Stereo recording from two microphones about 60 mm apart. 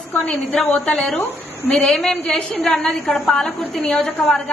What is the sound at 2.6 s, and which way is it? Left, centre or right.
Speech, left.